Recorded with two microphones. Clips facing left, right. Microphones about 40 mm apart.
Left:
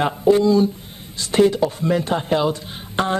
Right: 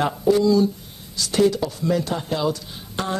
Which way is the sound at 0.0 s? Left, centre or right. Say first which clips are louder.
Left 3 dB; left.